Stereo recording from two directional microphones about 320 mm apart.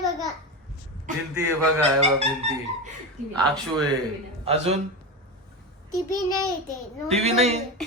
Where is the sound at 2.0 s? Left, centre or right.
Centre.